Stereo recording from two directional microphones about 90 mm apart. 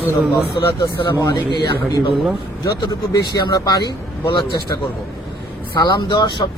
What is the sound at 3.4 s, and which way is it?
Speech, 50° left (ahead or behind).